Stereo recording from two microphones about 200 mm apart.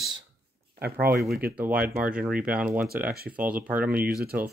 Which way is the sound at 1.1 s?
50° right (ahead or behind).